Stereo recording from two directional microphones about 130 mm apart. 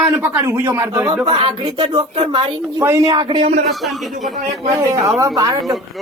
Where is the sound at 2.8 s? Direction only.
20° right (ahead or behind).